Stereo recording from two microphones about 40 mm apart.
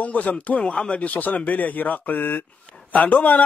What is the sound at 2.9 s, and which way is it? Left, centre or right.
Speech, left.